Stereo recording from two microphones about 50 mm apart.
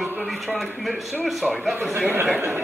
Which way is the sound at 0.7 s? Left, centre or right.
Centre.